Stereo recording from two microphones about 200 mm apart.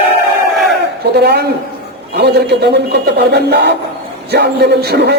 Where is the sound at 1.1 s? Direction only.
55° right (ahead or behind).